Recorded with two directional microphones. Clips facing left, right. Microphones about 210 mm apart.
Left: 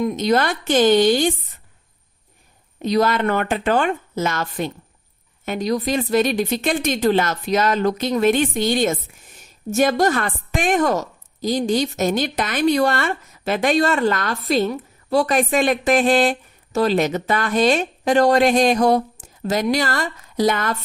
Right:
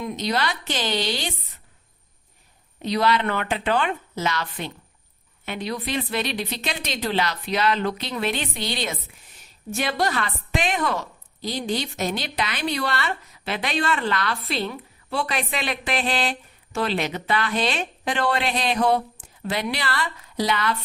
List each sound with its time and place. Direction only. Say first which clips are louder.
0.0 s a woman's voice: left 7 dB; 45° left (ahead or behind)
2.8 s a woman's voice: left 4 dB; 45° left (ahead or behind)